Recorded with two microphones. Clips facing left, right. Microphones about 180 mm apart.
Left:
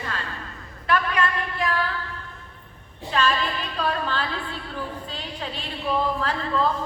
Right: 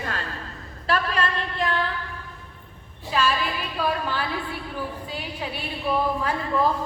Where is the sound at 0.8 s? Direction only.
30° right (ahead or behind).